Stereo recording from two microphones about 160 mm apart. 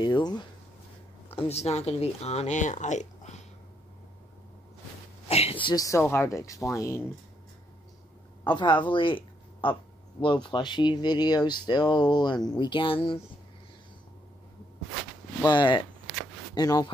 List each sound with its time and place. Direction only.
0.0 s speech: 25° left (ahead or behind)
1.3 s speech: 40° left (ahead or behind)
5.3 s speech: 35° left (ahead or behind); by 7.0 s 20° left (ahead or behind)
8.5 s speech: 30° left (ahead or behind)
14.9 s a sound: centre (ahead or behind)
15.4 s speech: 30° left (ahead or behind)